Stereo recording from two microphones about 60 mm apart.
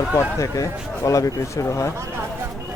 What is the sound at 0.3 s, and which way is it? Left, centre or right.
Speech, left.